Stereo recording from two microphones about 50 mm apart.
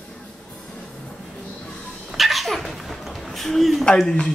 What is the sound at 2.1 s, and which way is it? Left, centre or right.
Dog, centre.